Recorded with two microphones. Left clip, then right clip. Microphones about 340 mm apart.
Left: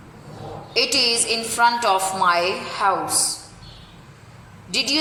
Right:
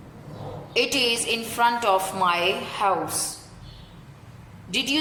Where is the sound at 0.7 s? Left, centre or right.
Centre.